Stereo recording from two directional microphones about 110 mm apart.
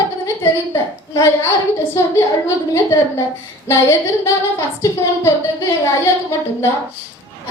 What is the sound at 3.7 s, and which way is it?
A woman's voice, 25° left (ahead or behind).